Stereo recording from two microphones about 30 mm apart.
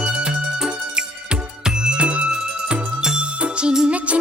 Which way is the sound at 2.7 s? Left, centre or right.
Right.